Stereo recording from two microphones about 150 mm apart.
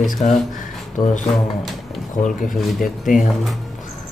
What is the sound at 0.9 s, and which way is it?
Speech, 55° left (ahead or behind).